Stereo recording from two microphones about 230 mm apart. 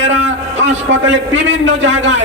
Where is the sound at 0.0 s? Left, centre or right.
Right.